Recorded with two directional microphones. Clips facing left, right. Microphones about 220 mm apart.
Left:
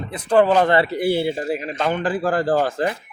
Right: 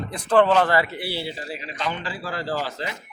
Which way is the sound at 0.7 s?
30° left (ahead or behind).